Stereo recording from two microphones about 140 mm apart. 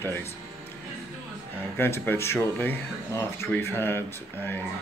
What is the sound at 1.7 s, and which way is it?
Speech, 15° left (ahead or behind).